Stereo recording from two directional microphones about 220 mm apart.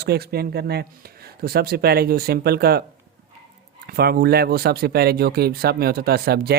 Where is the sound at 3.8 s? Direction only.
45° right (ahead or behind).